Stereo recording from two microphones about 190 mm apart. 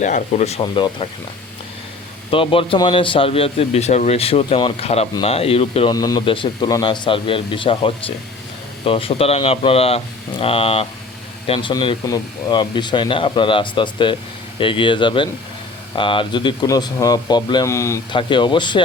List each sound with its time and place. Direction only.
0.0 s speech: 40° left (ahead or behind); by 1.0 s 25° left (ahead or behind)
2.3 s a man's voice: 30° left (ahead or behind)